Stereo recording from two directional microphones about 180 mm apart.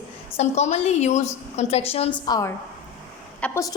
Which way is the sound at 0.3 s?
40° left (ahead or behind).